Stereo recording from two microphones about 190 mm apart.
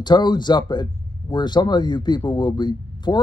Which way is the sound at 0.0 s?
25° left (ahead or behind).